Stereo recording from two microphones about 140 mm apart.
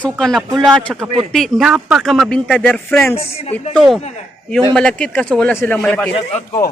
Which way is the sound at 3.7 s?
Centre (ahead or behind).